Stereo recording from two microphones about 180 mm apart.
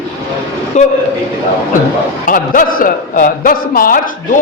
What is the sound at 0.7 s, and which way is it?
Speech, 40° left (ahead or behind).